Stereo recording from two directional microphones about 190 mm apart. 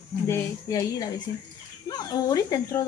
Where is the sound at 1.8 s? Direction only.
20° left (ahead or behind).